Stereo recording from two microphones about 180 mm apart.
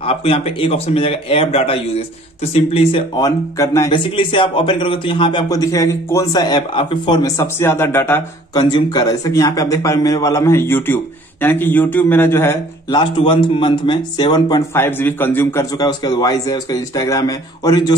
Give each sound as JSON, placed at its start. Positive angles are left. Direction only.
{"t": 0.0, "sound": "a man's voice", "side_deg": 30}
{"t": 3.2, "sound": "a man's voice", "side_deg": 20}
{"t": 13.0, "sound": "speech", "side_deg": 25}
{"t": 15.8, "sound": "speech", "side_deg": 20}